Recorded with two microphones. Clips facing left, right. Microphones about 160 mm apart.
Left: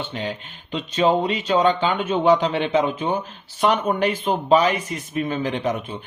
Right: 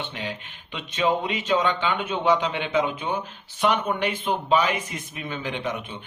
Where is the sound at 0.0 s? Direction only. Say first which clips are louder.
Left 4 dB; 35° left (ahead or behind).